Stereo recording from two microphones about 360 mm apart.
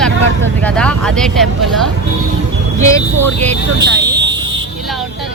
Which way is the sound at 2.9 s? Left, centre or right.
Centre.